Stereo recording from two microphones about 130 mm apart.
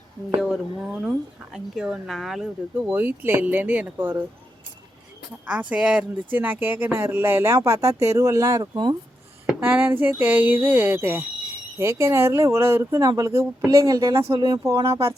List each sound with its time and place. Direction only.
0.4 s speech: 5° right (ahead or behind)
2.7 s speech: 15° right (ahead or behind)
5.5 s speech: 10° right (ahead or behind); by 9.0 s 35° right (ahead or behind)
9.6 s speech: 15° right (ahead or behind)